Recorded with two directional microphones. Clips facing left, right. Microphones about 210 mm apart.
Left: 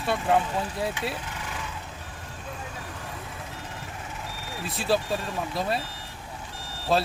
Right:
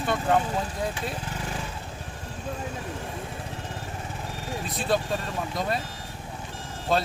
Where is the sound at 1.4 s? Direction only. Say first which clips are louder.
Right 3 dB; 35° right (ahead or behind).